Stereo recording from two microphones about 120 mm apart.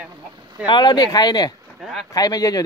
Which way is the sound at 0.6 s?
35° left (ahead or behind).